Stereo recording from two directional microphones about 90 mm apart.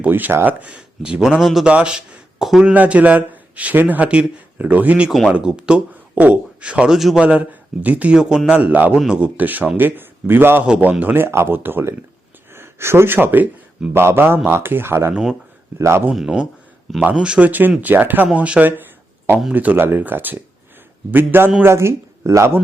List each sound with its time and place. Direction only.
0.0 s speech: 20° right (ahead or behind); by 2.7 s 5° right (ahead or behind)
2.7 s a man's voice: 15° right (ahead or behind)
16.1 s a man's voice: 10° right (ahead or behind); by 22.5 s 30° right (ahead or behind)